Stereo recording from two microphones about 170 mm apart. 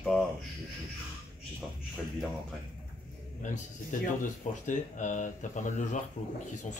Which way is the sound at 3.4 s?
45° left (ahead or behind).